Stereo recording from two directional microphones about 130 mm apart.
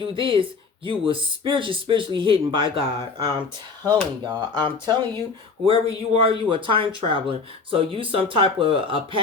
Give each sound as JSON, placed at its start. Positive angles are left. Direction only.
{"t": 0.1, "sound": "speech", "side_deg": -40}